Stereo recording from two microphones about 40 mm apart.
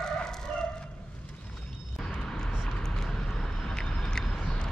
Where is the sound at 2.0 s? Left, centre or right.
Centre.